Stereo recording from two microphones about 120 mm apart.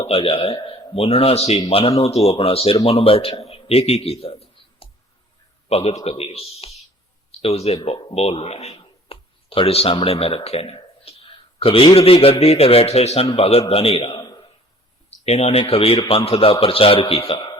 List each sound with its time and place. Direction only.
0.1 s a man's voice: 50° left (ahead or behind)
14.1 s a sound: 30° left (ahead or behind)
15.2 s a man's voice: 65° left (ahead or behind)